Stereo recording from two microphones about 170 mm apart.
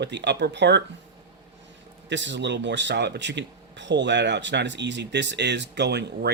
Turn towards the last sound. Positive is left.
turn(degrees=-80)